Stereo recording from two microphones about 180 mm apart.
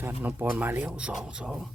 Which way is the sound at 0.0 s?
10° right (ahead or behind).